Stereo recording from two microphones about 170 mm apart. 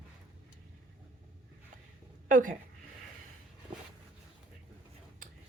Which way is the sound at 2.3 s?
50° right (ahead or behind).